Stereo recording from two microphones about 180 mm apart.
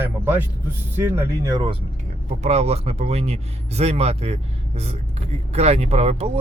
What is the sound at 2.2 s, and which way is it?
Speech, 40° right (ahead or behind).